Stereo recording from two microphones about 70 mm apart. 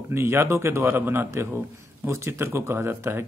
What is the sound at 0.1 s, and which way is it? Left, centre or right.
Speech, right.